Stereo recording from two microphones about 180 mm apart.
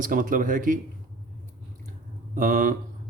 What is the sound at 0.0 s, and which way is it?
Speech, 50° right (ahead or behind).